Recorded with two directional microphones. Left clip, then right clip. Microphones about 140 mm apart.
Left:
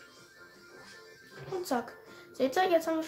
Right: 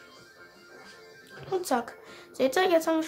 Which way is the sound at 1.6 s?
30° right (ahead or behind).